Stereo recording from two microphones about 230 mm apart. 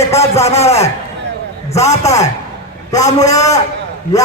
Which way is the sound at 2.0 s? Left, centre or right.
Centre.